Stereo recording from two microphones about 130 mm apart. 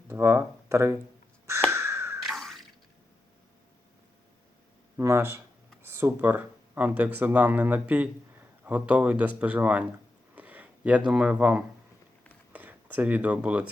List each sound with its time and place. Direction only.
0.1 s speech: 20° right (ahead or behind)
1.7 s crow: 20° right (ahead or behind)
2.2 s a sound: centre (ahead or behind)
4.9 s speech: 20° right (ahead or behind)
10.3 s a sound: 10° right (ahead or behind)
12.5 s speech: 10° right (ahead or behind)